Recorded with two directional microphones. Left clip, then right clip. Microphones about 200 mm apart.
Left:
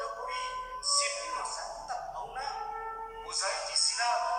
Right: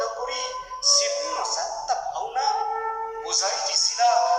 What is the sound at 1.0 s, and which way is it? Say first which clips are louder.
Music: right 8 dB; 30° right (ahead or behind).